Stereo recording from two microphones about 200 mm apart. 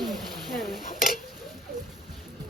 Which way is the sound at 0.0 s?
Centre (ahead or behind).